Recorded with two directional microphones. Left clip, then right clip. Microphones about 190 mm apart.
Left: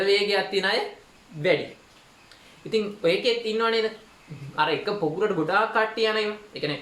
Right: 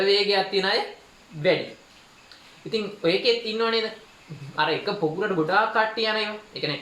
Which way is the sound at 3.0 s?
30° left (ahead or behind).